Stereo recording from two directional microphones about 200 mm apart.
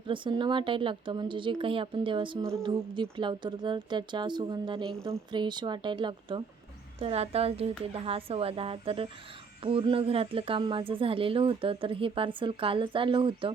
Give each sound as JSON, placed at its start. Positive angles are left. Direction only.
{"t": 0.1, "sound": "speech", "side_deg": -25}